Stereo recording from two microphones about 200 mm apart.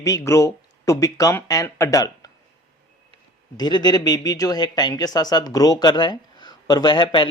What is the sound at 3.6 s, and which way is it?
Speech, 20° left (ahead or behind).